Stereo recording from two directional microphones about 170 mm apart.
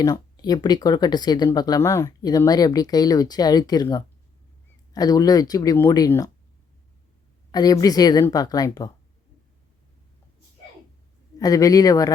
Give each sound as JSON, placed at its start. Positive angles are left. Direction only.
{"t": 0.0, "sound": "speech", "side_deg": 25}
{"t": 7.5, "sound": "speech", "side_deg": 20}
{"t": 11.3, "sound": "speech", "side_deg": 20}